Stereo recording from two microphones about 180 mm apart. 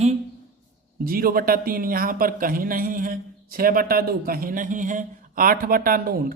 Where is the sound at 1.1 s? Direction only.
55° right (ahead or behind).